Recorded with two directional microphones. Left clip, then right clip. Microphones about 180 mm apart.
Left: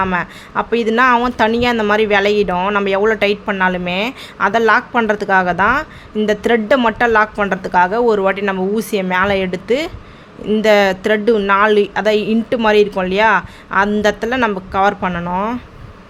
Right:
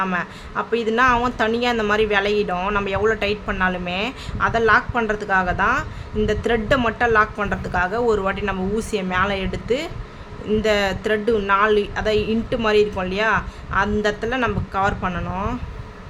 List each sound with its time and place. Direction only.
0.0 s a woman's voice: 40° left (ahead or behind)